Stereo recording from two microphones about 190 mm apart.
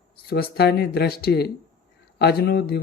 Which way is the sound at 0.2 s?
55° left (ahead or behind).